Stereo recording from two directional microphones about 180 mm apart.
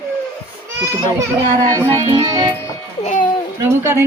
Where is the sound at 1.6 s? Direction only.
20° right (ahead or behind).